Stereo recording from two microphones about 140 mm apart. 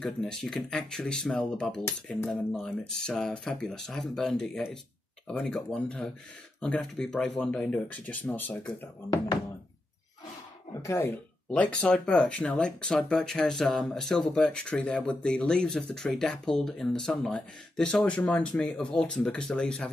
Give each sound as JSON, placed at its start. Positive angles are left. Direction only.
{"t": 0.0, "sound": "speech", "side_deg": 5}
{"t": 10.7, "sound": "throat clearing", "side_deg": 20}
{"t": 11.5, "sound": "speech", "side_deg": 5}